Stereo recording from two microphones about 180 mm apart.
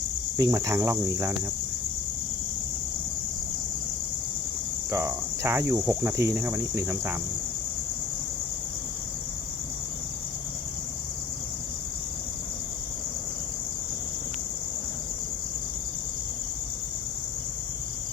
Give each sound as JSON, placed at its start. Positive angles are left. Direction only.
{"t": 0.3, "sound": "cricket", "side_deg": -20}
{"t": 4.9, "sound": "cricket", "side_deg": -15}